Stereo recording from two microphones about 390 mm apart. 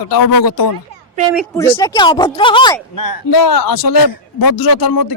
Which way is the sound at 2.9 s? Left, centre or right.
Left.